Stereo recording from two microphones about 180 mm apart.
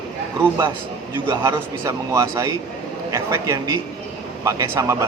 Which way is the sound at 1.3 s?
20° right (ahead or behind).